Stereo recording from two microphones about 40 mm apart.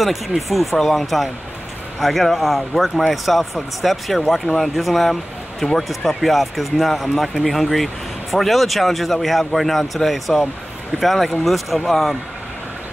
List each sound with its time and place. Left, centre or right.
0.0 s speech: centre